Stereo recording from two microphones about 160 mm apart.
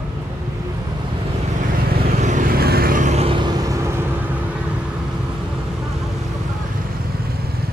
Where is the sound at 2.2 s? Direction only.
50° right (ahead or behind); by 4.3 s 15° right (ahead or behind).